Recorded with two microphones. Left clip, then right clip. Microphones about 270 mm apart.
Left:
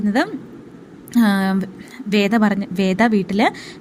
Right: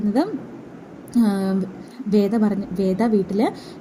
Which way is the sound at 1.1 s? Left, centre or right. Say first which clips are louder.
Left 3 dB; left.